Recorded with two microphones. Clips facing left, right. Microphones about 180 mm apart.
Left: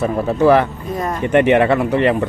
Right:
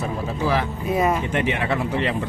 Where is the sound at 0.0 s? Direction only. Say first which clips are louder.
Left 10 dB; 60° left (ahead or behind).